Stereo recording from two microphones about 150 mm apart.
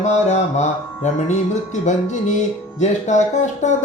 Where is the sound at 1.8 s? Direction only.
55° left (ahead or behind).